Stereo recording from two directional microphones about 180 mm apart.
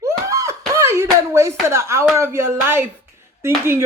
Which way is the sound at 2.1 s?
15° right (ahead or behind).